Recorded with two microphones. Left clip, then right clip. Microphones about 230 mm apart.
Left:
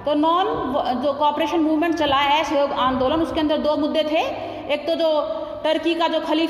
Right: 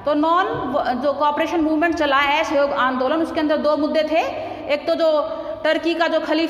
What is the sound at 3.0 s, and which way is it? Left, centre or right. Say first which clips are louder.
A woman's voice: even; centre.